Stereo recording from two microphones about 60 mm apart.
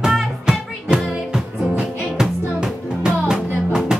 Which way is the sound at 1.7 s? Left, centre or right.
Centre.